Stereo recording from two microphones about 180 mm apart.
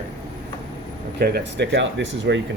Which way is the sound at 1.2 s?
65° right (ahead or behind).